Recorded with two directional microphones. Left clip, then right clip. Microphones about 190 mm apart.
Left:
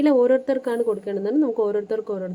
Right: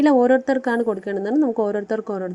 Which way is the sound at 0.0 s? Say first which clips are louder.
Right 2 dB; 20° right (ahead or behind).